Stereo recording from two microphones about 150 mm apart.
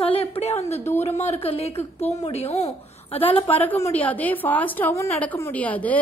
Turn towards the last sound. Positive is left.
turn(degrees=10)  # may be behind; listen again after turning